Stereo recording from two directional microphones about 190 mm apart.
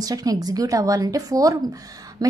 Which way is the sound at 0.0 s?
20° right (ahead or behind).